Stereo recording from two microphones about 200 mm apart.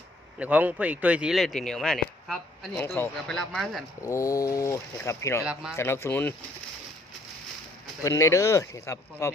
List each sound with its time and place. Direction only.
0.3 s speech: 5° right (ahead or behind)
2.7 s speech: 10° left (ahead or behind)
4.0 s speech: 15° left (ahead or behind)
8.0 s speech: 15° left (ahead or behind)